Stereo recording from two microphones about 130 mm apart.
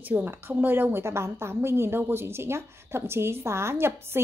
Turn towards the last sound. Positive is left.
turn(degrees=-20)  # may be behind; listen again after turning